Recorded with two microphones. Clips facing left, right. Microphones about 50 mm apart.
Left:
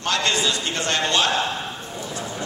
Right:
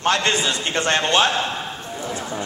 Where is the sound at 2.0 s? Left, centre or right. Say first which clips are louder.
Right 3 dB; right.